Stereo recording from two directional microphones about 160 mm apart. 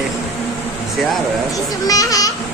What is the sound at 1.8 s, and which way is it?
Speech, 20° left (ahead or behind).